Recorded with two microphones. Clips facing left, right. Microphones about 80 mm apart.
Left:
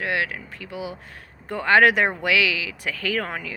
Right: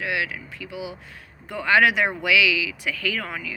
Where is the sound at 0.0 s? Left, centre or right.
Left.